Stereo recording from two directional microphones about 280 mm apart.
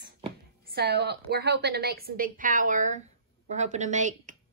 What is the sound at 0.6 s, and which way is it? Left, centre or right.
A woman's voice, right.